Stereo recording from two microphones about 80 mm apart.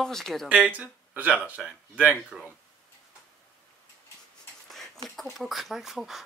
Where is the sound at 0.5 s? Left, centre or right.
Centre.